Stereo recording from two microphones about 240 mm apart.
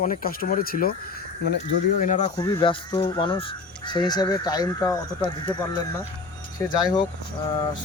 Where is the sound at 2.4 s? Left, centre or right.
Centre.